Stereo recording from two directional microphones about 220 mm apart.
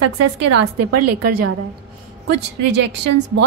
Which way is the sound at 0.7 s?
90° right.